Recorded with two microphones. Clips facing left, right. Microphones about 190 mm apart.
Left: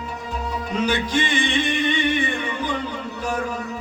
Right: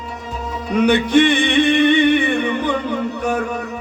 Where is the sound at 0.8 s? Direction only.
65° right (ahead or behind).